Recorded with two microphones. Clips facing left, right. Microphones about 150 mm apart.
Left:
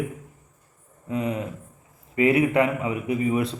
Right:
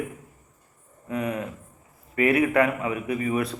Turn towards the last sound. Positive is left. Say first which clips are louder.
# left 2 dB
turn(degrees=25)  # may be behind; listen again after turning